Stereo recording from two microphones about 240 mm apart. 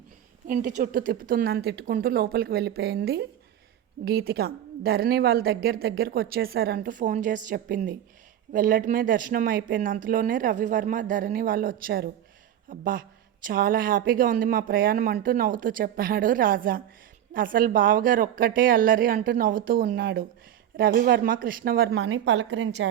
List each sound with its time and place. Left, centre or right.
0.4 s speech: right
21.9 s a woman's voice: right